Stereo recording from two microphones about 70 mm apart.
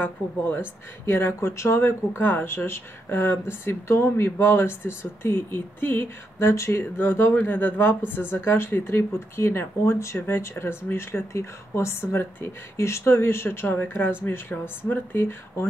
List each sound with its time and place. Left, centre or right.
0.0 s speech: left
6.5 s speech: left
6.8 s speech: left